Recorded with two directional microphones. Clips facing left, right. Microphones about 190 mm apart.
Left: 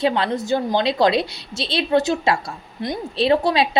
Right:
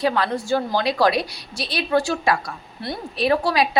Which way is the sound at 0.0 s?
25° left (ahead or behind).